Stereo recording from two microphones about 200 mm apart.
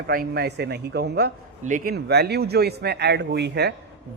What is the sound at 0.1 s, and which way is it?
Speech, 50° right (ahead or behind).